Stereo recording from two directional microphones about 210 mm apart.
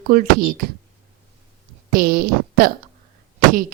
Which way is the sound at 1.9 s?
45° right (ahead or behind).